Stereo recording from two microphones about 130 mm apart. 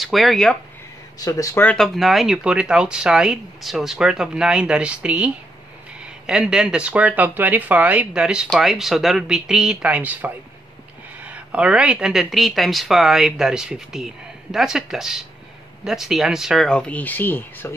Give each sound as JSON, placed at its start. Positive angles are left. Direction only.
{"t": 0.0, "sound": "speech", "side_deg": 0}
{"t": 1.2, "sound": "speech", "side_deg": 25}
{"t": 1.6, "sound": "speech", "side_deg": 10}
{"t": 2.0, "sound": "speech", "side_deg": 0}